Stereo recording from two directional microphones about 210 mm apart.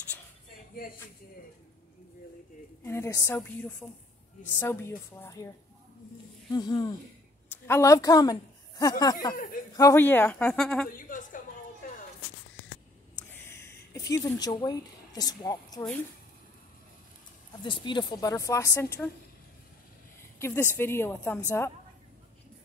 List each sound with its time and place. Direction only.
2.8 s speech: 10° left (ahead or behind)
6.5 s a woman's voice: 20° left (ahead or behind)
9.3 s speech: 40° left (ahead or behind)
9.8 s speech: 15° left (ahead or behind)
10.9 s a sound: 40° left (ahead or behind)
13.3 s a sound: 10° left (ahead or behind)
17.6 s speech: 20° left (ahead or behind)
20.3 s speech: 10° left (ahead or behind)